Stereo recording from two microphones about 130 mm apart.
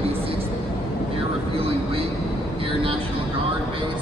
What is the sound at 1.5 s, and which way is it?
Vehicle, 45° right (ahead or behind).